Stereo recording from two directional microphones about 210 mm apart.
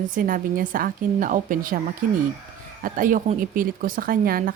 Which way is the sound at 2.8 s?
40° right (ahead or behind).